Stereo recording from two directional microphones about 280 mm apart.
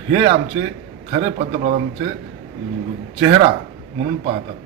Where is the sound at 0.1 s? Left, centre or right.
Centre.